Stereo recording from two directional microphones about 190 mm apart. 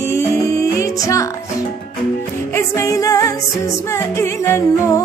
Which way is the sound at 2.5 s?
15° left (ahead or behind).